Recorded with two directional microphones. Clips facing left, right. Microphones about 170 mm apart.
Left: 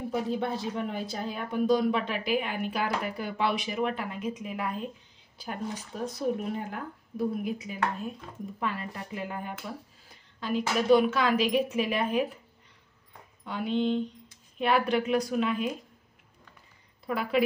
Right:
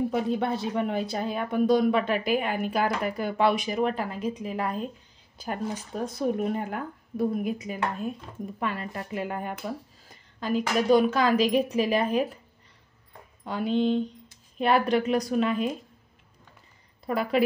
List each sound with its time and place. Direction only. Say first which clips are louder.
0.1 s speech: right 3 dB; 70° right (ahead or behind); by 4.8 s 35° right (ahead or behind)
6.3 s speech: right 5 dB; 55° right (ahead or behind)
8.5 s speech: right 2 dB; 60° right (ahead or behind)
10.0 s a woman's voice: right 3 dB; 40° right (ahead or behind)
13.4 s a woman's voice: right 3 dB; 40° right (ahead or behind)
17.0 s a woman's voice: right 3 dB; 40° right (ahead or behind)